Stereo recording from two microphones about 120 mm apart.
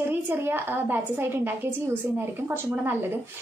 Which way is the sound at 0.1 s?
15° right (ahead or behind).